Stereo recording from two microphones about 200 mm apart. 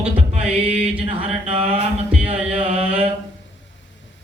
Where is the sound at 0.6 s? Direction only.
30° right (ahead or behind).